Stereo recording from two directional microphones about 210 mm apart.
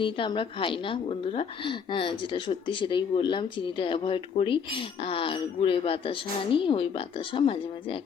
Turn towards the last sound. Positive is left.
turn(degrees=25)  # may be behind; listen again after turning